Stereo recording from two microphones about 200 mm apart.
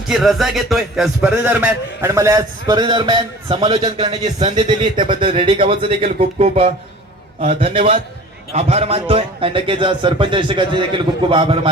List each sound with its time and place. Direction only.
0.1 s a man's voice: centre (ahead or behind); by 11.7 s 25° right (ahead or behind)